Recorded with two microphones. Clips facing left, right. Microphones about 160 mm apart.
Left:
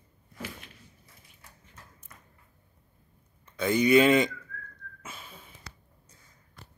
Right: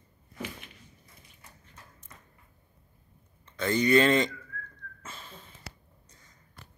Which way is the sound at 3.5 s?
10° left (ahead or behind).